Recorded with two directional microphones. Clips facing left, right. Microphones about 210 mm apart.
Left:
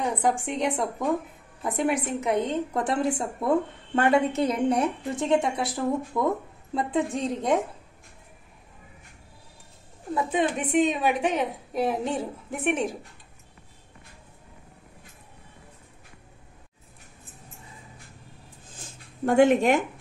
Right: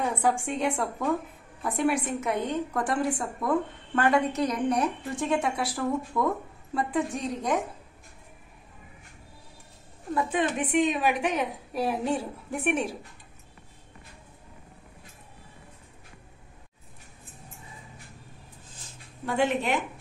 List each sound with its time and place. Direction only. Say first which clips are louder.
0.0 s a woman's voice: left 1 dB; 15° left (ahead or behind)
10.1 s a woman's voice: left 1 dB; 20° left (ahead or behind)
19.2 s speech: left 8 dB; 50° left (ahead or behind)